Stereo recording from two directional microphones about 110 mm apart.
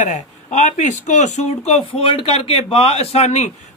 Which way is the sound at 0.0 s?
90° left.